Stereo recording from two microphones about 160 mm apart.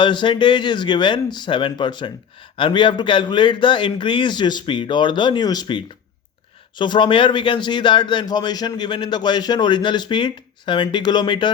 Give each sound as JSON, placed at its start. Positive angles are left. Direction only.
{"t": 0.0, "sound": "speech", "side_deg": 30}